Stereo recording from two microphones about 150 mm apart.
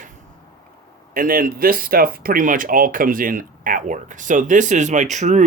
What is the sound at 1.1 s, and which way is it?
Speech, 70° right (ahead or behind).